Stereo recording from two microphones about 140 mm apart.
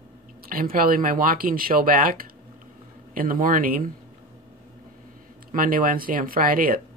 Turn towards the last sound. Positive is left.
turn(degrees=-85)